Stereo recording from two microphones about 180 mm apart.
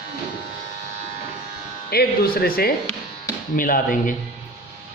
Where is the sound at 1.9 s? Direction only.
60° left (ahead or behind).